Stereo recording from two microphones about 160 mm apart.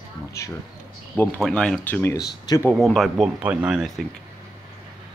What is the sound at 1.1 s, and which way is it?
Speech, 10° left (ahead or behind).